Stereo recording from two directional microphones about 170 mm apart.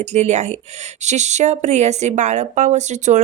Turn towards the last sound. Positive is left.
turn(degrees=-45)  # may be behind; listen again after turning